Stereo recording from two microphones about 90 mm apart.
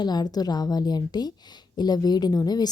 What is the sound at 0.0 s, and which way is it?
Speech, 50° left (ahead or behind).